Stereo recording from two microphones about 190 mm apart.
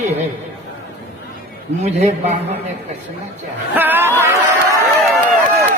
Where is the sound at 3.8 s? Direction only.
10° right (ahead or behind).